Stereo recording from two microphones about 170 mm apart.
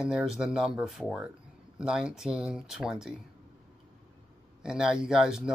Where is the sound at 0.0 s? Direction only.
5° right (ahead or behind).